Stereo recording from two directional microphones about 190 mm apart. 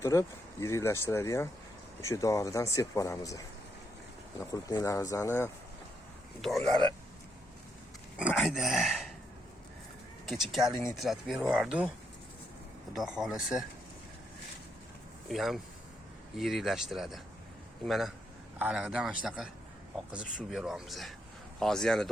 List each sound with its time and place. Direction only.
0.0 s speech: 15° left (ahead or behind)
6.4 s speech: centre (ahead or behind)
8.2 s speech: 5° right (ahead or behind)
10.2 s speech: centre (ahead or behind)
12.9 s speech: centre (ahead or behind)
15.3 s speech: centre (ahead or behind)